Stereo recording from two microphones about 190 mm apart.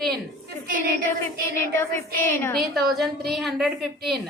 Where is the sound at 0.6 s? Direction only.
45° right (ahead or behind).